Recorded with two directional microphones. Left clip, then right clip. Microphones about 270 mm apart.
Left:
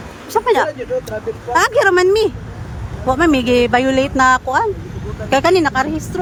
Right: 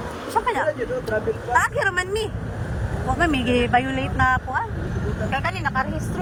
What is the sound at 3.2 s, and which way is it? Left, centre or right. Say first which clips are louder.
Speech: left 7 dB; centre.